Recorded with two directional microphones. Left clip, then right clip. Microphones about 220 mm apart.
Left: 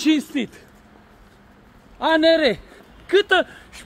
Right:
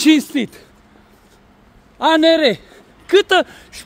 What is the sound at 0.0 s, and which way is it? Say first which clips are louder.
Speech: right 6 dB; 55° right (ahead or behind).